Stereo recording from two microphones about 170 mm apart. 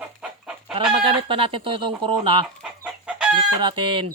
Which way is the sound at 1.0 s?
30° right (ahead or behind).